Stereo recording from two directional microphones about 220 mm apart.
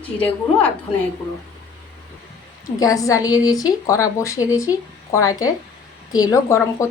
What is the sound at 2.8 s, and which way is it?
A woman's voice, 15° left (ahead or behind).